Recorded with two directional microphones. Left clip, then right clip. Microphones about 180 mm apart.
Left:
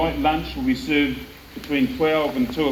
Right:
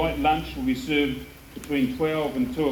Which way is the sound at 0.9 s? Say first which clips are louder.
Left 2 dB; 70° right (ahead or behind).